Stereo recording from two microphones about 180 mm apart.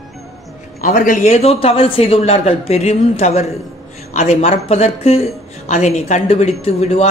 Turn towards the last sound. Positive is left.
turn(degrees=35)  # may be behind; listen again after turning